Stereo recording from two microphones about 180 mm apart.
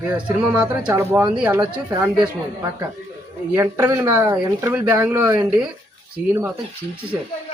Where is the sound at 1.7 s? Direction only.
25° right (ahead or behind).